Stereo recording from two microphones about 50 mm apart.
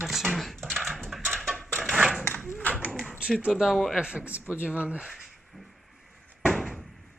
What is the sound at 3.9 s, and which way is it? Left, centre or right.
Speech, right.